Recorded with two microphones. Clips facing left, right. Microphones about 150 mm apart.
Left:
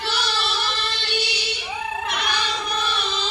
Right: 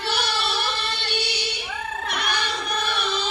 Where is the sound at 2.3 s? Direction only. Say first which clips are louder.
Left 1 dB; 55° right (ahead or behind).